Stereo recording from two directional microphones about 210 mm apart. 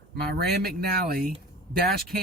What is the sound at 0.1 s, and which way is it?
Speech, 45° right (ahead or behind).